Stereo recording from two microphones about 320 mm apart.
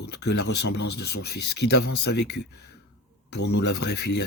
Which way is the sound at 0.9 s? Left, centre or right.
Left.